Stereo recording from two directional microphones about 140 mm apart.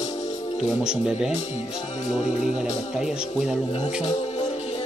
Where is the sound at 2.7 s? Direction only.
55° left (ahead or behind).